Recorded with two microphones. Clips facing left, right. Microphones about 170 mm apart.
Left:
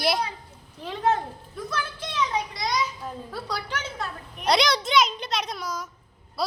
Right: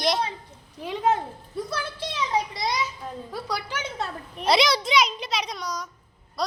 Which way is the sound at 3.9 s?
30° right (ahead or behind).